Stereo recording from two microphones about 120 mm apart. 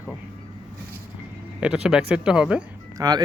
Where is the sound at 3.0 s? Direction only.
35° right (ahead or behind).